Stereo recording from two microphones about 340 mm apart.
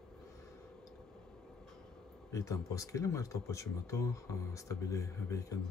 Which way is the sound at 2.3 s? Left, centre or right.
Centre.